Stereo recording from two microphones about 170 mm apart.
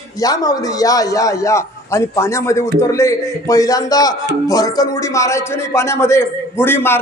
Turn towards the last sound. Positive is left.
turn(degrees=15)  # may be behind; listen again after turning